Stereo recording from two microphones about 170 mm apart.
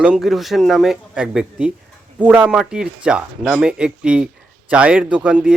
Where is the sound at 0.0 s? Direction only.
5° right (ahead or behind).